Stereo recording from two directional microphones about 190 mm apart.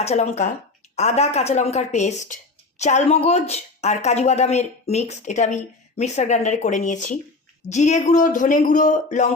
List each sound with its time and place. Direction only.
0.0 s speech: 35° left (ahead or behind)